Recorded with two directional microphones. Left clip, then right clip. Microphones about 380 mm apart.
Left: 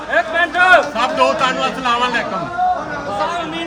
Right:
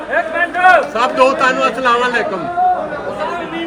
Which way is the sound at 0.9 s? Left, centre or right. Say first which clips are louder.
Right 3 dB; centre.